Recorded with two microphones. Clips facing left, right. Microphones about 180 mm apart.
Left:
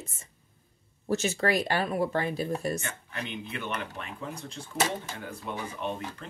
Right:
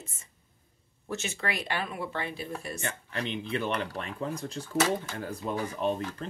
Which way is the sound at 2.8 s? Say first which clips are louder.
Right 3 dB; 35° right (ahead or behind).